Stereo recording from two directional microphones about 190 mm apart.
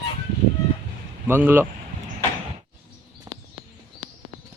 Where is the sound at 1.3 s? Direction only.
10° right (ahead or behind).